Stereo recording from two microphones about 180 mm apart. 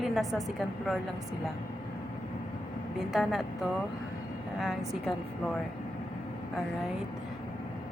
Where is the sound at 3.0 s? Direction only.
Centre (ahead or behind).